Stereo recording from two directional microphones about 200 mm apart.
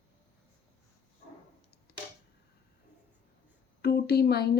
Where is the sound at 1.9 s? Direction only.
55° left (ahead or behind).